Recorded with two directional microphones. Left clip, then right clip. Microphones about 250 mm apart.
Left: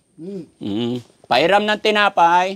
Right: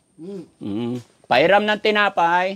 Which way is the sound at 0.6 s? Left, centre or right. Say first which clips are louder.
Left 4 dB; centre.